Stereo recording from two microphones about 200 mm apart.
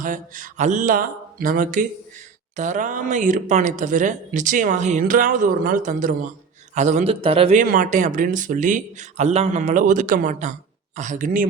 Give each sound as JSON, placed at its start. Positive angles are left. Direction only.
{"t": 0.0, "sound": "speech", "side_deg": -40}
{"t": 7.6, "sound": "speech", "side_deg": -40}